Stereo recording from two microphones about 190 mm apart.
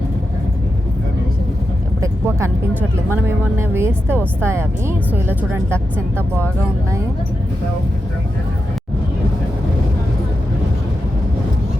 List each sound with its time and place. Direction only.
2.0 s vehicle: 15° right (ahead or behind)
3.1 s speech: 15° right (ahead or behind)
6.1 s speech: 10° left (ahead or behind)